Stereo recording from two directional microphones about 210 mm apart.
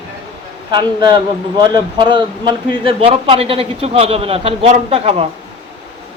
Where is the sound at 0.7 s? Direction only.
20° right (ahead or behind).